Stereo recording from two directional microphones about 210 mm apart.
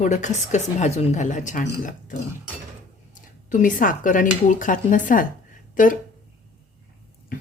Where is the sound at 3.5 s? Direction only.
35° left (ahead or behind).